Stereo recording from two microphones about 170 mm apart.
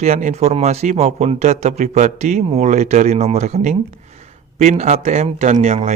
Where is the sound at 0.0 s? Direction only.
40° right (ahead or behind).